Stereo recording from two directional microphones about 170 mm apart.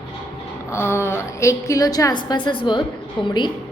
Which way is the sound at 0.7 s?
15° left (ahead or behind).